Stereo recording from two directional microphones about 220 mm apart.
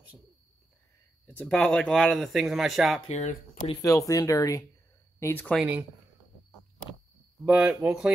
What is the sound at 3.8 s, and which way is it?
Speech, 15° left (ahead or behind).